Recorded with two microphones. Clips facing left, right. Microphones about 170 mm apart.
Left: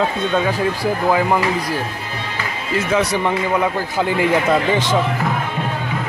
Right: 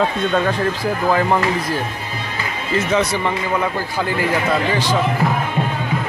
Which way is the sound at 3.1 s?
20° left (ahead or behind).